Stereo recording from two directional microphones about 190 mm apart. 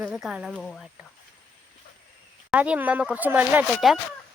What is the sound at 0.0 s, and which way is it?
Speech, 5° right (ahead or behind).